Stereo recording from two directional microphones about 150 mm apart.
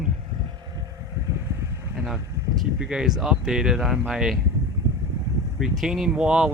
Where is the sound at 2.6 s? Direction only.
5° right (ahead or behind).